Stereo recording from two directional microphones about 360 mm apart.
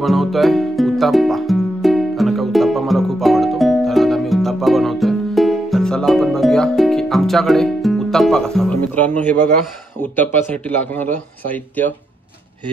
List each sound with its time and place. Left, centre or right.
0.0 s music: centre
9.9 s a man's voice: centre